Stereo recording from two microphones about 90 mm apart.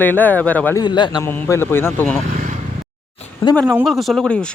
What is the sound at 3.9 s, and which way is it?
Speech, centre (ahead or behind).